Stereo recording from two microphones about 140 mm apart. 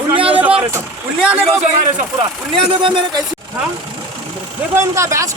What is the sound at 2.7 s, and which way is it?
Speech, 40° right (ahead or behind).